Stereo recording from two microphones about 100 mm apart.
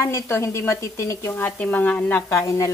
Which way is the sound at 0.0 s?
30° left (ahead or behind).